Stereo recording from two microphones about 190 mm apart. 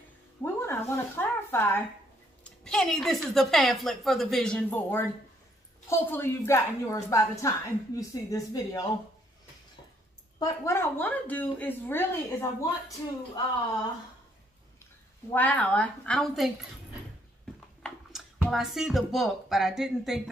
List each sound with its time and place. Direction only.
0.4 s a sound: 15° left (ahead or behind)
2.6 s a woman's voice: 5° left (ahead or behind); by 8.8 s 20° left (ahead or behind)
10.4 s a woman's voice: 15° left (ahead or behind)
15.3 s a woman's voice: 10° left (ahead or behind)
18.4 s a woman's voice: centre (ahead or behind)